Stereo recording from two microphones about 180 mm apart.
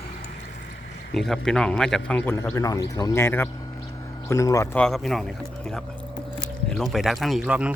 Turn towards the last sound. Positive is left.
turn(degrees=-5)  # may be behind; listen again after turning